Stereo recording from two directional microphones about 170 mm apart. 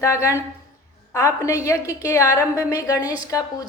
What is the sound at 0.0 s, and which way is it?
A woman's voice, 20° left (ahead or behind).